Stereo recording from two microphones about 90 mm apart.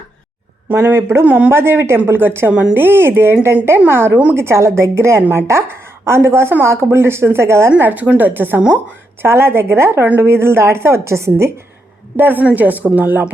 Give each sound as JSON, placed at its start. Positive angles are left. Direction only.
{"t": 0.7, "sound": "a woman's voice", "side_deg": -25}
{"t": 2.5, "sound": "speech", "side_deg": -10}
{"t": 2.7, "sound": "a woman's voice", "side_deg": -25}
{"t": 7.7, "sound": "a woman's voice", "side_deg": -20}